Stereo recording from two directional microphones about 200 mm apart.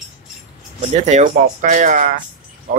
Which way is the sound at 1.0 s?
40° right (ahead or behind).